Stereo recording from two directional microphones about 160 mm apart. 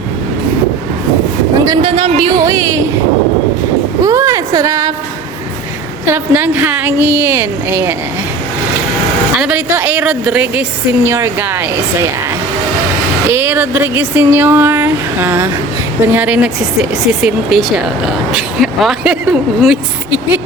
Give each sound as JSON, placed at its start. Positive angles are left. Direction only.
{"t": 1.6, "sound": "speech", "side_deg": -30}
{"t": 4.0, "sound": "a sound", "side_deg": -20}
{"t": 6.1, "sound": "speech", "side_deg": -10}
{"t": 9.4, "sound": "speech", "side_deg": -10}
{"t": 13.2, "sound": "speech", "side_deg": -15}